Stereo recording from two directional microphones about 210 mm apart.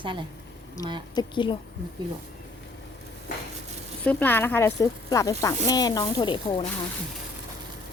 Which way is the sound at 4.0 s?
10° left (ahead or behind).